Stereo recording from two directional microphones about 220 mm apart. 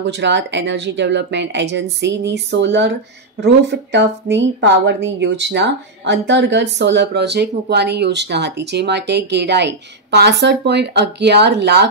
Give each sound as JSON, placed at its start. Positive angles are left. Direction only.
{"t": 0.0, "sound": "speech", "side_deg": -55}